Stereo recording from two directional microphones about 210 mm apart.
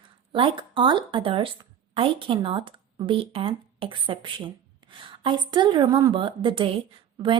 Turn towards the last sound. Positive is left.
turn(degrees=-25)  # may be behind; listen again after turning